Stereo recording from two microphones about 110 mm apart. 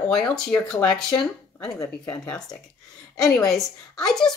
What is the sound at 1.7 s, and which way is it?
Speech, 35° left (ahead or behind).